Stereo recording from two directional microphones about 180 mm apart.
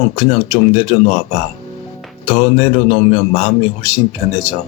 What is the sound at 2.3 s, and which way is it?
A man's voice, 35° left (ahead or behind).